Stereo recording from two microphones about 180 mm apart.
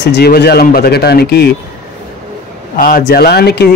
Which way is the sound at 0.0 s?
65° left (ahead or behind).